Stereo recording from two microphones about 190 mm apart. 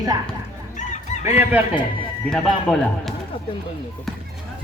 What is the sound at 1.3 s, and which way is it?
Speech, 10° right (ahead or behind).